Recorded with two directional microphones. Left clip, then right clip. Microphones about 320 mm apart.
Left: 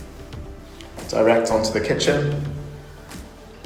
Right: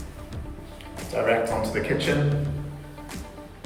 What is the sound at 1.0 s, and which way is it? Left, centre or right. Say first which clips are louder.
Music: left 4 dB; centre.